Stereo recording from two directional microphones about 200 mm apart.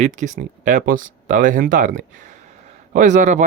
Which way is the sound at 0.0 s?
40° right (ahead or behind).